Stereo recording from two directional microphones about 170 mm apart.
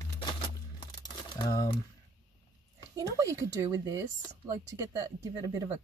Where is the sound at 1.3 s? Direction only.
25° left (ahead or behind).